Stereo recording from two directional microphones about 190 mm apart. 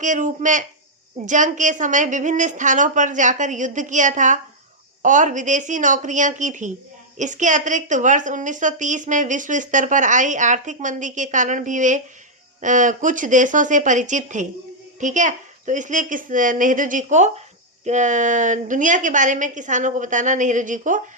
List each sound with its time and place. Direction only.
0.0 s a woman's voice: 40° right (ahead or behind)